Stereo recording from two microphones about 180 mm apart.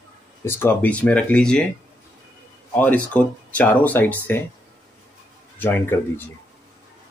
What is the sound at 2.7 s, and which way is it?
Speech, 10° left (ahead or behind).